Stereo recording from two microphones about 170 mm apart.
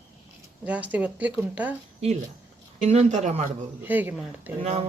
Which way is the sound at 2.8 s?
40° right (ahead or behind).